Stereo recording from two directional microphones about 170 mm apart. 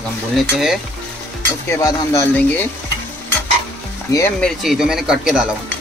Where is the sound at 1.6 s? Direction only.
20° left (ahead or behind).